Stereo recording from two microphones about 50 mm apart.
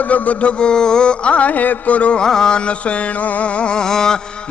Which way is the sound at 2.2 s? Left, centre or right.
Centre.